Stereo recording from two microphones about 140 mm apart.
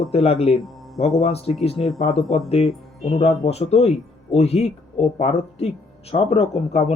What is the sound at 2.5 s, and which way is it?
Speech, 45° left (ahead or behind).